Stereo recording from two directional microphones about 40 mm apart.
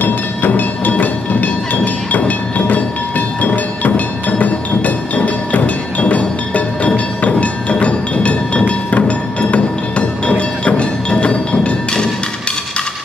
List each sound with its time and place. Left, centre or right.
0.0 s a sound: left
2.1 s train: left
7.2 s music: left